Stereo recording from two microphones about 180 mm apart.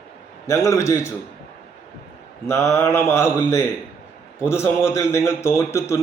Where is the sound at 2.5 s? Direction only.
15° left (ahead or behind).